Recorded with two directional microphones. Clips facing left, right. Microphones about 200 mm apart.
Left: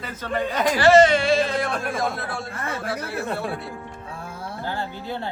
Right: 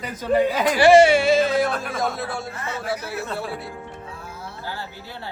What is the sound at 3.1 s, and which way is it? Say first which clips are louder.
Speech: left 2 dB; 55° left (ahead or behind).